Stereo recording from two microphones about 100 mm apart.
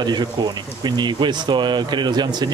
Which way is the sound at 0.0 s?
45° right (ahead or behind).